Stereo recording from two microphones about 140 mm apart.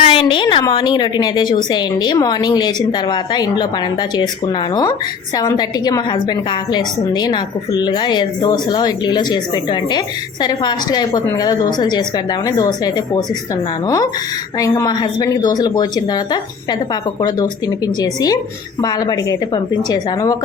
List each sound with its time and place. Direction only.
0.0 s a sound: 40° left (ahead or behind)
0.4 s a woman's voice: 30° left (ahead or behind)
4.7 s a woman's voice: 25° left (ahead or behind)